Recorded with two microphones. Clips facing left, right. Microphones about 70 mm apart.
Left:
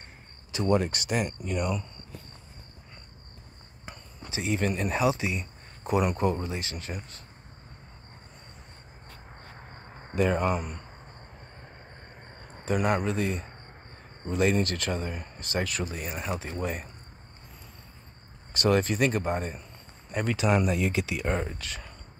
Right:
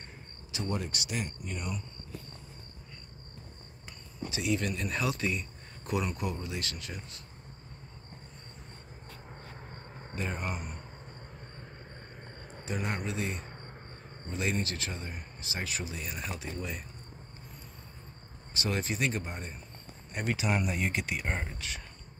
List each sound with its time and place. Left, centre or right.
0.7 s speech: left
0.9 s a man's voice: left
1.4 s speech: left
4.3 s speech: left
4.9 s speech: centre
6.1 s speech: left
6.6 s speech: left
9.6 s cricket: centre
10.1 s speech: left
12.7 s speech: left
13.0 s a man's voice: left
14.2 s a man's voice: left
18.5 s speech: left